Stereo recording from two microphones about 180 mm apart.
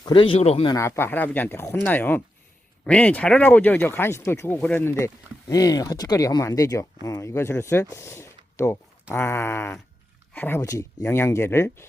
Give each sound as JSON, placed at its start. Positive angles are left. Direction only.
{"t": 0.0, "sound": "speech", "side_deg": 30}
{"t": 0.7, "sound": "speech", "side_deg": 15}